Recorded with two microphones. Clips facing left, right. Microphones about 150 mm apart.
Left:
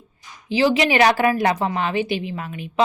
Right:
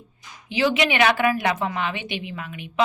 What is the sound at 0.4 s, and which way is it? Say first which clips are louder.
A woman's voice: left 3 dB; 35° left (ahead or behind).